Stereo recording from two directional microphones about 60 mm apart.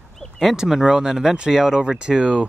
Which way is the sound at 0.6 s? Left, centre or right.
Centre.